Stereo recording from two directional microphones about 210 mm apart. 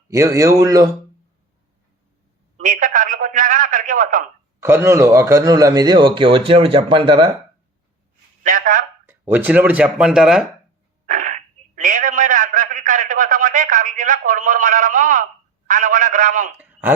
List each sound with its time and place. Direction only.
0.1 s speech: 15° right (ahead or behind)
2.6 s a man's voice: 40° right (ahead or behind)
4.6 s a man's voice: 10° right (ahead or behind)
8.4 s a man's voice: 40° right (ahead or behind)
9.0 s speech: 10° right (ahead or behind)
11.0 s a man's voice: 40° right (ahead or behind)